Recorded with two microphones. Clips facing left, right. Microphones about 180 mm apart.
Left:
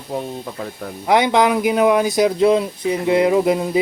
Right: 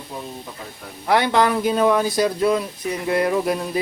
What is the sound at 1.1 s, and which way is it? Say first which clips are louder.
Speech: left 3 dB; 20° left (ahead or behind).